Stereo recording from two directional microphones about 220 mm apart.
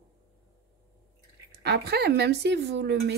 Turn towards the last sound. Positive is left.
turn(degrees=-50)  # may be behind; listen again after turning